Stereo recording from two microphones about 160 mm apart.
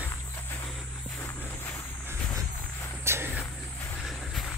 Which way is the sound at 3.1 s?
15° right (ahead or behind).